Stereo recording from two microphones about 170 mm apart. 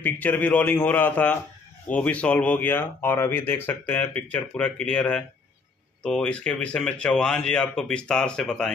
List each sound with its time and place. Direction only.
0.0 s speech: 10° left (ahead or behind)